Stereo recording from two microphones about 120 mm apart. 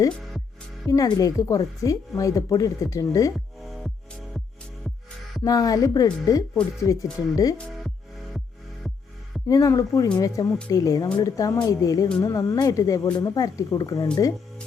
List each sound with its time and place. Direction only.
0.9 s a woman's voice: 30° left (ahead or behind)
5.4 s a woman's voice: 30° left (ahead or behind)
9.5 s a woman's voice: 30° left (ahead or behind)